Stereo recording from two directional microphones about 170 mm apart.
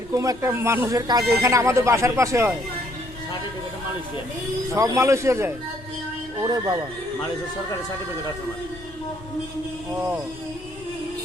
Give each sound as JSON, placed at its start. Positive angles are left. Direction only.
{"t": 0.1, "sound": "speech", "side_deg": -20}
{"t": 4.7, "sound": "speech", "side_deg": -15}